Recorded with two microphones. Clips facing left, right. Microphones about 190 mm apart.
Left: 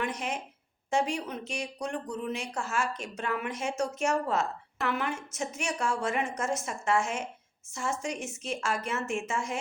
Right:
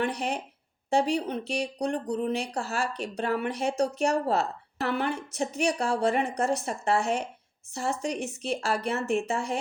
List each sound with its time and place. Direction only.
0.0 s speech: 35° right (ahead or behind)